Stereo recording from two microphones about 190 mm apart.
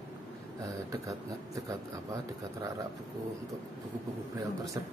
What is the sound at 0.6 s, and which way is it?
Speech, 15° right (ahead or behind).